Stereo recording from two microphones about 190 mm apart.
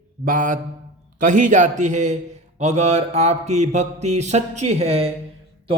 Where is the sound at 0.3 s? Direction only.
45° right (ahead or behind).